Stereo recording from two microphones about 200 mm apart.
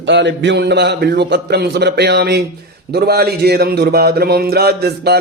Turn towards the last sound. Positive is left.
turn(degrees=-55)  # may be behind; listen again after turning